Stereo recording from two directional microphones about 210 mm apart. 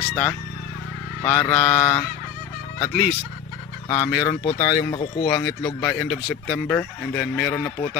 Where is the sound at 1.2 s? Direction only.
15° left (ahead or behind).